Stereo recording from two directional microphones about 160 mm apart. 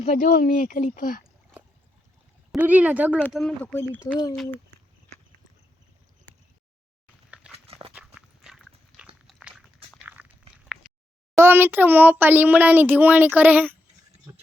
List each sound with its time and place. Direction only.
0.0 s speech: 55° left (ahead or behind)
2.5 s speech: 10° right (ahead or behind)
3.3 s speech: 5° left (ahead or behind)
4.4 s a sound: 15° left (ahead or behind)
7.5 s livestock: 35° right (ahead or behind)
7.9 s dog: 5° right (ahead or behind)
10.1 s a sound: 10° right (ahead or behind)
11.3 s speech: 15° right (ahead or behind)